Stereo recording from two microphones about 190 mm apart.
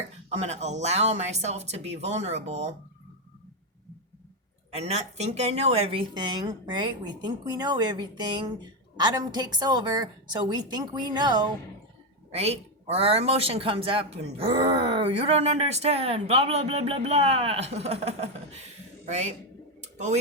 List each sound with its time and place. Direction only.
0.3 s speech: 35° right (ahead or behind)
4.7 s speech: 35° right (ahead or behind)
12.3 s speech: 35° right (ahead or behind)
19.8 s a sound: 35° right (ahead or behind)